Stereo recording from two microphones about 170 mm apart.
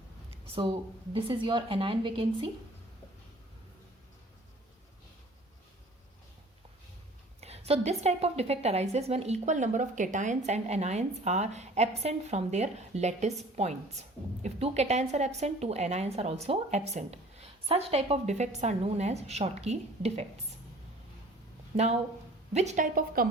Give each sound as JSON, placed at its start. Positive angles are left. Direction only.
{"t": 0.4, "sound": "a sound", "side_deg": -35}
{"t": 1.1, "sound": "a woman's voice", "side_deg": -30}
{"t": 7.4, "sound": "a woman's voice", "side_deg": -40}
{"t": 22.5, "sound": "a woman's voice", "side_deg": -45}